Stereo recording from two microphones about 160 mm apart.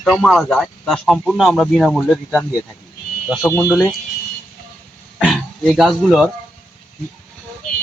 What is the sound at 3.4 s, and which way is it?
Speech, 10° left (ahead or behind).